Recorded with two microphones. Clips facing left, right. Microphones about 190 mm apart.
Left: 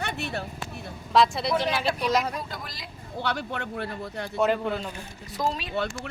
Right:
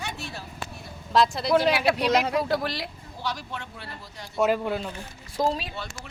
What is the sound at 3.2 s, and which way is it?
A man's voice, 60° left (ahead or behind).